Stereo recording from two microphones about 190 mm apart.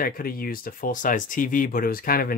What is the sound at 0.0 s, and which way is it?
Speech, 50° left (ahead or behind).